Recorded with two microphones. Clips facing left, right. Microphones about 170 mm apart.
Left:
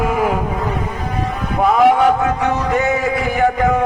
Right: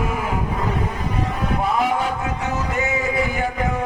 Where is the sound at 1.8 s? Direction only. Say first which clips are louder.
Left 10 dB; 65° left (ahead or behind).